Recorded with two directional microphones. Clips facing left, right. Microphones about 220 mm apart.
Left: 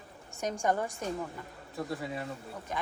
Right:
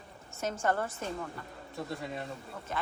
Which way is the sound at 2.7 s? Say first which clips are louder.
Even; 15° left (ahead or behind).